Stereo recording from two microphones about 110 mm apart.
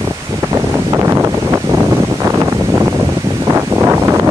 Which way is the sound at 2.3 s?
25° right (ahead or behind).